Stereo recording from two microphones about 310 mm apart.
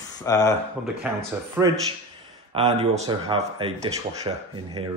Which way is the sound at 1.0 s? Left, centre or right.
Centre.